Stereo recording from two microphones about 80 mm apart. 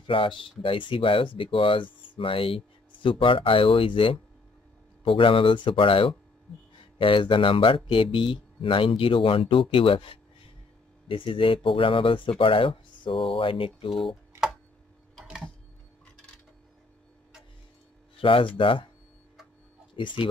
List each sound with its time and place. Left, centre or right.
0.0 s speech: left
18.1 s speech: left
20.0 s speech: left